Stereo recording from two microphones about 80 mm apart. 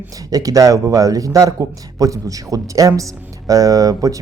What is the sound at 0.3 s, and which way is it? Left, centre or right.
Speech, right.